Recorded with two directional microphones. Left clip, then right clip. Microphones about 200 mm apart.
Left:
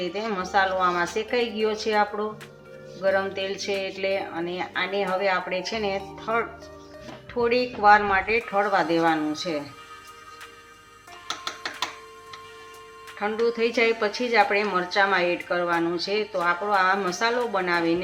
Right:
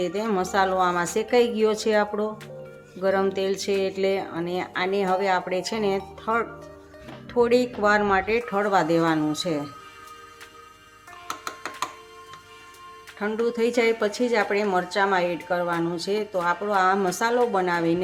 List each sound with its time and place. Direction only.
0.0 s speech: 55° right (ahead or behind)
13.1 s speech: 55° right (ahead or behind)